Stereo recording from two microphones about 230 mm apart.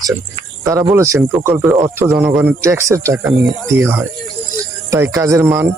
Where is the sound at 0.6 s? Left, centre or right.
Centre.